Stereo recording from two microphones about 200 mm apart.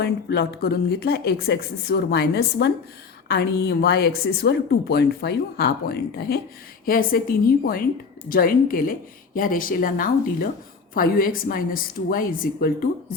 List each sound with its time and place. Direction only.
0.0 s speech: 55° left (ahead or behind)